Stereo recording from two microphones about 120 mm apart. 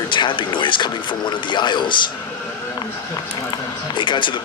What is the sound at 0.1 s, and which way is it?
Speech, 40° left (ahead or behind).